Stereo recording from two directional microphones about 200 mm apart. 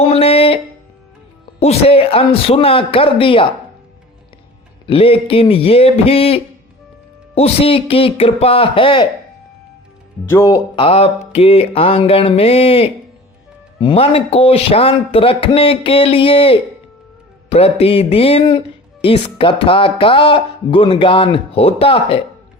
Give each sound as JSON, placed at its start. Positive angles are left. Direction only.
{"t": 0.1, "sound": "music", "side_deg": 30}
{"t": 1.5, "sound": "speech", "side_deg": 30}
{"t": 4.9, "sound": "speech", "side_deg": 30}
{"t": 10.2, "sound": "speech", "side_deg": 15}
{"t": 10.5, "sound": "speech", "side_deg": 25}